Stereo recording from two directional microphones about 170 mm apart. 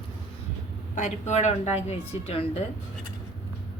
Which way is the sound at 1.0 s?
45° left (ahead or behind).